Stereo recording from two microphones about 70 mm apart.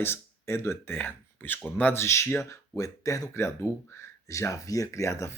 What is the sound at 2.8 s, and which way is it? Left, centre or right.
Speech, left.